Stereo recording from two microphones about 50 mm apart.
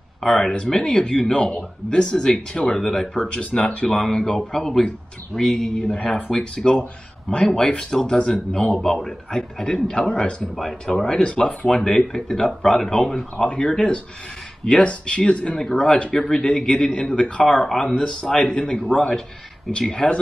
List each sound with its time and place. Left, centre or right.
0.2 s a man's voice: centre
10.5 s a man's voice: centre